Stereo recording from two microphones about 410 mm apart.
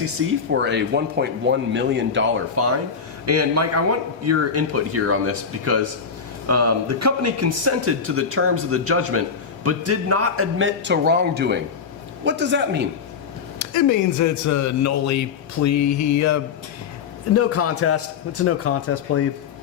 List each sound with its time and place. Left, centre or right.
0.6 s speech: right
13.6 s a man's voice: left